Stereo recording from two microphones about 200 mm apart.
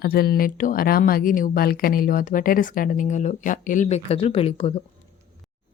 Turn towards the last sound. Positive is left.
turn(degrees=30)  # may be behind; listen again after turning